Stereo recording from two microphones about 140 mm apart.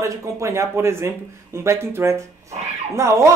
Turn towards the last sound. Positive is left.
turn(degrees=-20)  # may be behind; listen again after turning